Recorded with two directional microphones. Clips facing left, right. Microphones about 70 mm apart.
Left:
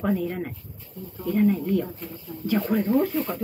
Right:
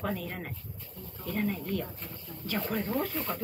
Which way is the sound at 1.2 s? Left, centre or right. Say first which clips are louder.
Left 10 dB; centre.